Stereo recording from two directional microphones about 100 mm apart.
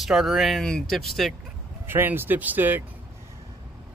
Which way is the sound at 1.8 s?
20° right (ahead or behind).